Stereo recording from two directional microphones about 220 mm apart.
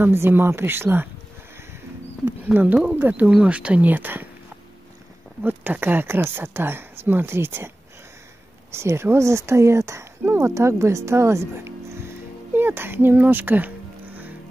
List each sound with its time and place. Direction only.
0.0 s speech: 10° right (ahead or behind)
2.2 s speech: 10° right (ahead or behind)
5.4 s speech: 10° right (ahead or behind)
8.7 s speech: 10° right (ahead or behind)